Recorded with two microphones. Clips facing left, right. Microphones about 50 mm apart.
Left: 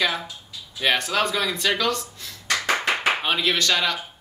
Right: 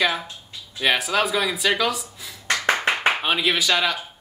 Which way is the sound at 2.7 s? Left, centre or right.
Centre.